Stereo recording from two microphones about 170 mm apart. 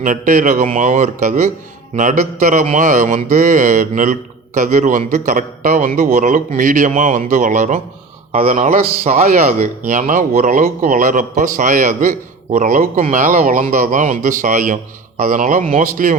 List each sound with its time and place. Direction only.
0.0 s speech: 50° right (ahead or behind)